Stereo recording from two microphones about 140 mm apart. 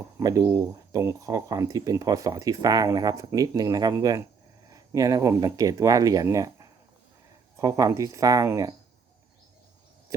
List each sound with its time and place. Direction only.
0.2 s speech: 25° right (ahead or behind)